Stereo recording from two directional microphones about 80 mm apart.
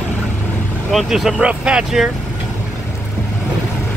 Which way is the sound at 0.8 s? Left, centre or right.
Centre.